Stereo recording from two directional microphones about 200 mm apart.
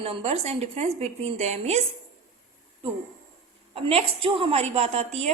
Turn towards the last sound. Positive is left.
turn(degrees=-35)  # may be behind; listen again after turning